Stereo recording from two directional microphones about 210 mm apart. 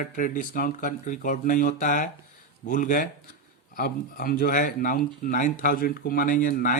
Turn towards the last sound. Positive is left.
turn(degrees=40)  # may be behind; listen again after turning